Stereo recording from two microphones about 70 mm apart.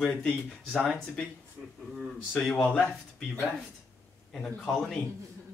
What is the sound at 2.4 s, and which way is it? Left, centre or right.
Speech, centre.